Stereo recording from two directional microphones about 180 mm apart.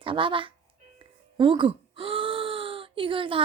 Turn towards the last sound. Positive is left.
turn(degrees=-30)  # may be behind; listen again after turning